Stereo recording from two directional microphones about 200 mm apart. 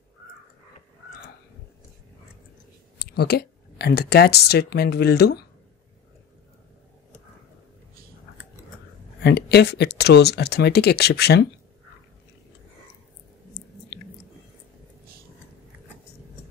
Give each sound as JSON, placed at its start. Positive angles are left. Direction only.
{"t": 3.0, "sound": "speech", "side_deg": 55}
{"t": 9.2, "sound": "speech", "side_deg": 55}